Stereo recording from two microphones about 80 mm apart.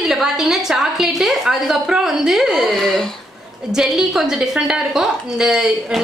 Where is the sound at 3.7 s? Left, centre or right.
Centre.